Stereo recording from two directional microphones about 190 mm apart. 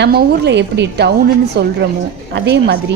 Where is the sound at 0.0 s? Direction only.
55° right (ahead or behind).